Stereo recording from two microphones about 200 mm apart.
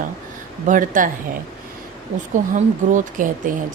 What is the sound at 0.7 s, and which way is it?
Speech, 40° right (ahead or behind).